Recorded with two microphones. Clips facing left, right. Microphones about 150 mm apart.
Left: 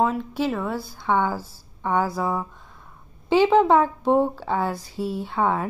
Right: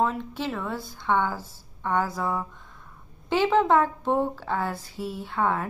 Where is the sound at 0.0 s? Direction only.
10° left (ahead or behind).